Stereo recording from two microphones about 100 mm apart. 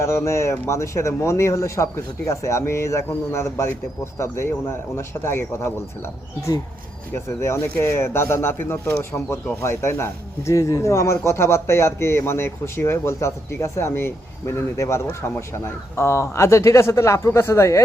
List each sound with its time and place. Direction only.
0.0 s speech: 25° left (ahead or behind)
7.3 s speech: 25° left (ahead or behind)